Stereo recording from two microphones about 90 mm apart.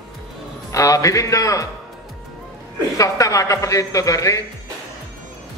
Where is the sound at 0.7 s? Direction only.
40° left (ahead or behind).